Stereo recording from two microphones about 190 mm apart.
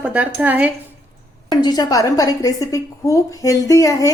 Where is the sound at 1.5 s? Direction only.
20° left (ahead or behind).